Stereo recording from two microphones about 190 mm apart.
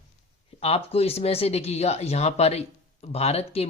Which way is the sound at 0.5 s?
30° left (ahead or behind).